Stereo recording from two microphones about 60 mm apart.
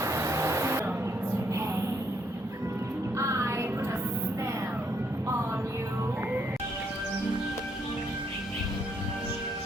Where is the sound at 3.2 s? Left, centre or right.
Right.